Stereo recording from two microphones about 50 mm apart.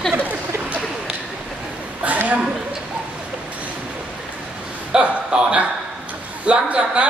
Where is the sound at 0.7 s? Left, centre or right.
Right.